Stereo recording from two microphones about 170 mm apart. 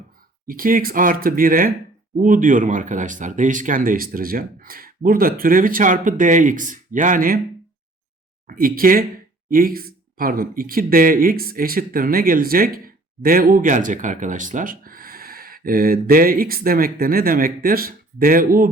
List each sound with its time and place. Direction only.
0.4 s speech: 55° right (ahead or behind)
8.4 s speech: 55° right (ahead or behind)